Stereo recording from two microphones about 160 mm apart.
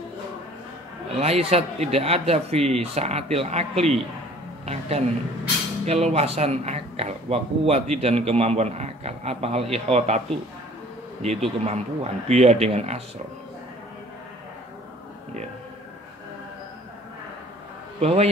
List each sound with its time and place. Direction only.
1.1 s speech: 40° right (ahead or behind)
11.2 s speech: 40° right (ahead or behind)
18.0 s speech: 40° right (ahead or behind)